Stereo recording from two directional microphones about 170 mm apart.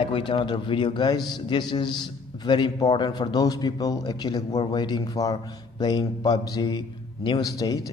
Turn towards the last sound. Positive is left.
turn(degrees=20)  # may be behind; listen again after turning